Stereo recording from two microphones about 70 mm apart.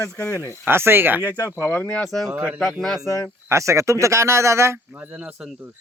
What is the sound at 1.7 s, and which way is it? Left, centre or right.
Speech, left.